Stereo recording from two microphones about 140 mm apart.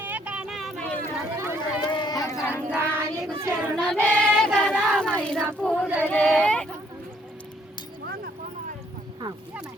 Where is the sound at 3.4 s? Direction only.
20° right (ahead or behind).